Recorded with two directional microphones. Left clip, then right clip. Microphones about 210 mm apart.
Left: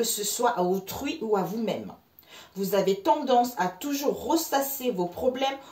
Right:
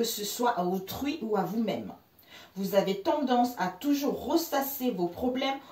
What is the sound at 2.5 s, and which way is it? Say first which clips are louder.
A woman's voice: left 2 dB; 55° left (ahead or behind).